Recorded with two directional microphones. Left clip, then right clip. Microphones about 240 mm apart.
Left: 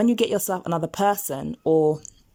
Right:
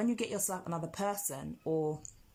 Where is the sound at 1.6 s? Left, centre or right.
Left.